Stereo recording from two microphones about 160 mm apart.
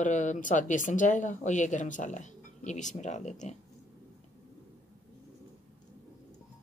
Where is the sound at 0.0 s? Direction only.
50° left (ahead or behind).